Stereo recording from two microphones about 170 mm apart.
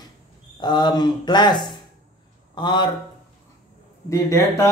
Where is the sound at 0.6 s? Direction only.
25° left (ahead or behind).